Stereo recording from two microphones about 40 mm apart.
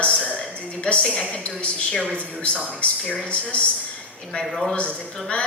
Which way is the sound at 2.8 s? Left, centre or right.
Left.